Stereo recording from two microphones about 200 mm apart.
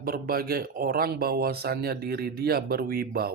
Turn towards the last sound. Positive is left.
turn(degrees=-50)  # may be behind; listen again after turning